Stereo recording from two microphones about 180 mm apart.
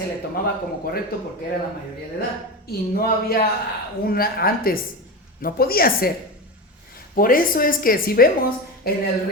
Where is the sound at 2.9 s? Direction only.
60° left (ahead or behind).